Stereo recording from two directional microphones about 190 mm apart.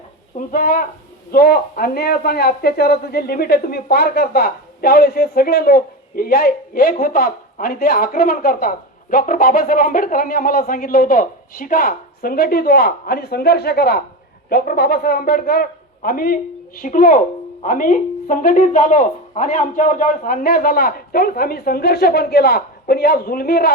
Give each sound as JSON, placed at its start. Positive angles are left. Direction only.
{"t": 0.3, "sound": "a man's voice", "side_deg": 50}